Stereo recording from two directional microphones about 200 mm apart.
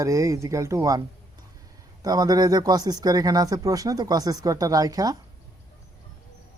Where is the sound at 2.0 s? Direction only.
20° right (ahead or behind).